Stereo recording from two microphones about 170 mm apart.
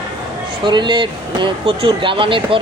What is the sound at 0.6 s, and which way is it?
Speech, 25° right (ahead or behind).